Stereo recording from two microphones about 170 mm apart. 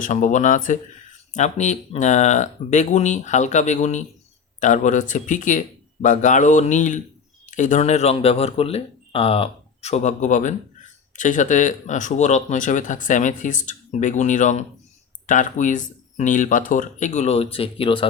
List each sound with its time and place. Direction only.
0.0 s speech: 50° left (ahead or behind); by 18.0 s 30° left (ahead or behind)